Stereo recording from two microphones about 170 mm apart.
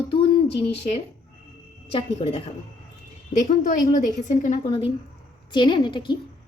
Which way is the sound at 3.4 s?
45° left (ahead or behind).